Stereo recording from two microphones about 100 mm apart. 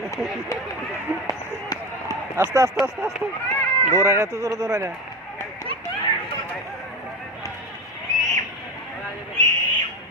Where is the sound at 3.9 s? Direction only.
30° right (ahead or behind).